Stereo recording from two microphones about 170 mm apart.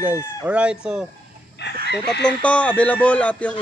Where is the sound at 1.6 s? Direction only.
85° left.